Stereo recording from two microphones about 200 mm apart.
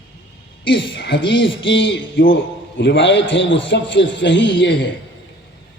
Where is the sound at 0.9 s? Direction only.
60° left (ahead or behind).